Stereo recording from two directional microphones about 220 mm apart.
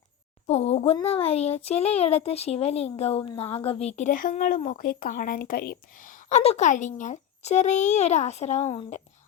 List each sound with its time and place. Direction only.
0.4 s a child's voice: 30° left (ahead or behind)